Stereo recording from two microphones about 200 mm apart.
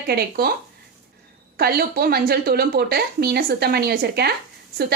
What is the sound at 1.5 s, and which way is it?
A woman's voice, 50° right (ahead or behind).